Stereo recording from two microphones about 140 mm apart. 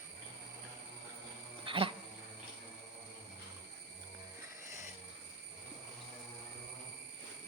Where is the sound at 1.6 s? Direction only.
40° right (ahead or behind).